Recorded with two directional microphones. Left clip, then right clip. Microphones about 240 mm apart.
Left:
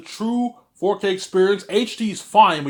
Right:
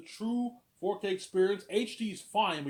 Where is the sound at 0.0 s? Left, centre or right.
Centre.